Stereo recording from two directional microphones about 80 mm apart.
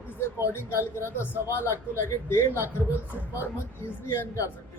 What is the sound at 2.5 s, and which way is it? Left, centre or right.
Speech, right.